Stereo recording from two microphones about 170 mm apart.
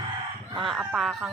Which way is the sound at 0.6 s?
Centre (ahead or behind).